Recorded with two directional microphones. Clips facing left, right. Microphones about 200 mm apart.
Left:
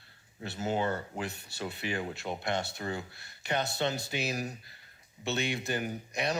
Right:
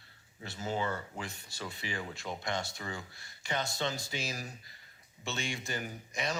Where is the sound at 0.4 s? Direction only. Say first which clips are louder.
Left 4 dB; 65° left (ahead or behind).